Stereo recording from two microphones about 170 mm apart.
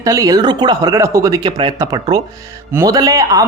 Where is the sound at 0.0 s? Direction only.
20° right (ahead or behind).